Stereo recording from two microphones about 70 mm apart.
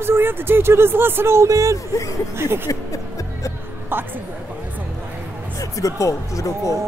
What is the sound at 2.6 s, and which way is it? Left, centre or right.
Music, left.